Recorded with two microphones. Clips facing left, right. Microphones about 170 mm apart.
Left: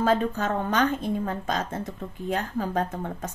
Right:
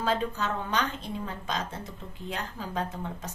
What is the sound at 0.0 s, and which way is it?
A woman's voice, 50° left (ahead or behind).